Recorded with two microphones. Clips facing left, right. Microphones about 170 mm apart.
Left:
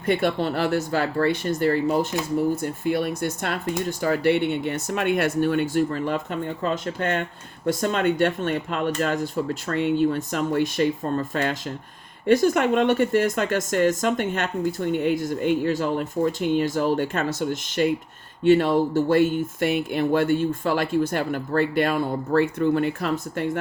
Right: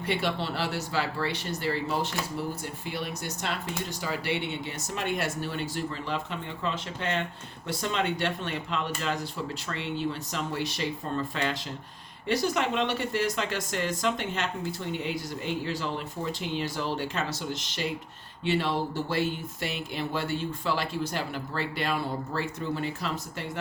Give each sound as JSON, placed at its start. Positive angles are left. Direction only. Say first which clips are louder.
{"t": 0.0, "sound": "speech", "louder": "left 7 dB", "side_deg": 50}